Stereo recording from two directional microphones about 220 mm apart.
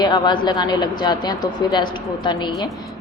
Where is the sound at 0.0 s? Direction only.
20° left (ahead or behind).